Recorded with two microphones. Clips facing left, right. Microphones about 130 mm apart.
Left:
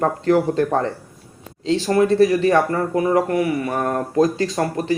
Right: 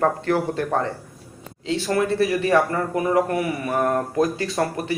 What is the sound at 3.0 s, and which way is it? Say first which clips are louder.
Speech: left 3 dB; 25° right (ahead or behind).